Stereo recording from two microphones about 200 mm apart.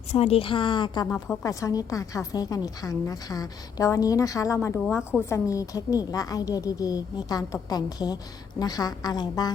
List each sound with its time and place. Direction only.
0.1 s a woman's voice: 30° left (ahead or behind)